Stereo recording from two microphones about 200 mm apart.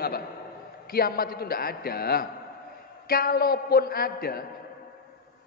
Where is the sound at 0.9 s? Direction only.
50° left (ahead or behind).